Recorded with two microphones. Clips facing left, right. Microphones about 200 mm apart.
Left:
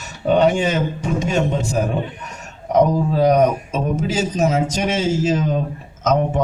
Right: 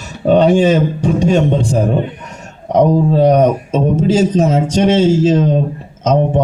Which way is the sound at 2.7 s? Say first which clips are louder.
Right 5 dB; 30° right (ahead or behind).